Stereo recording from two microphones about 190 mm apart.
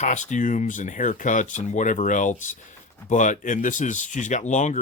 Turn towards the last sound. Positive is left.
turn(degrees=40)  # may be behind; listen again after turning